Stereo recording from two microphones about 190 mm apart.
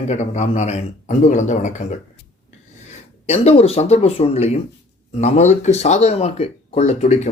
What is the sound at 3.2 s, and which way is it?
Speech, 35° left (ahead or behind).